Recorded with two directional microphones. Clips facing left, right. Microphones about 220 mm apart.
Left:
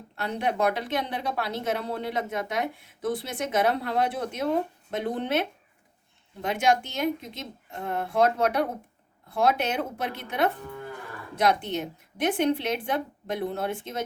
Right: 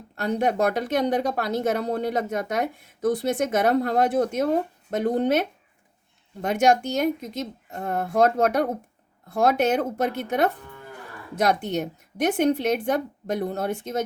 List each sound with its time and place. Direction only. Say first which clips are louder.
0.2 s a woman's voice: right 4 dB; 45° right (ahead or behind)